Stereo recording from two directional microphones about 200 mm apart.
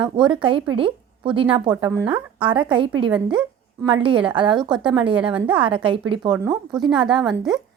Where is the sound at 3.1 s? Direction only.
5° right (ahead or behind).